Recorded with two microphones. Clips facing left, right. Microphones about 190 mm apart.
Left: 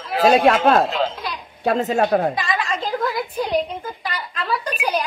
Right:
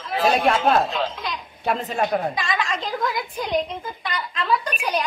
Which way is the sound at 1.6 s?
45° left (ahead or behind).